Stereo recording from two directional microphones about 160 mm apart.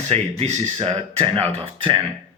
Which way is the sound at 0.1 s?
40° right (ahead or behind).